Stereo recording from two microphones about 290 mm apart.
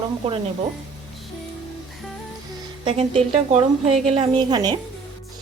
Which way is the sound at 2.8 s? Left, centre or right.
Centre.